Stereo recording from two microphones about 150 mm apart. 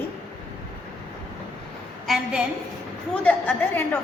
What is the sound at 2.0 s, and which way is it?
Speech, 5° right (ahead or behind).